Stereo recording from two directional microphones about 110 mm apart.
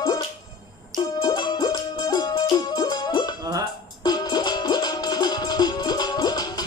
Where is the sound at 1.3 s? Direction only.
35° left (ahead or behind).